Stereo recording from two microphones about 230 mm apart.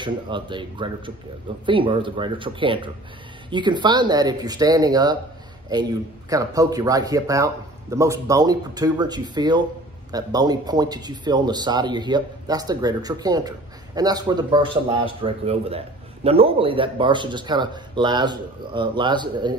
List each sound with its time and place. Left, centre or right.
0.0 s speech: right